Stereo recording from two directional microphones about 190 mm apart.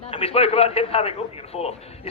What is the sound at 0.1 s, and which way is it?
Speech, 30° left (ahead or behind).